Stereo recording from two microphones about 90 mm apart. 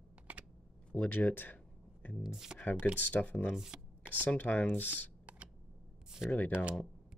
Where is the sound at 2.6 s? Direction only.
15° left (ahead or behind).